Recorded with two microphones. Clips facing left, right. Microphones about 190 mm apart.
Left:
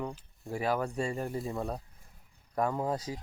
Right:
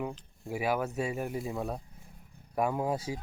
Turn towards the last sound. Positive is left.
turn(degrees=-10)  # may be behind; listen again after turning